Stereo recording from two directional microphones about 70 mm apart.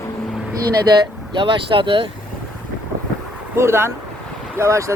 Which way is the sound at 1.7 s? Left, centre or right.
Right.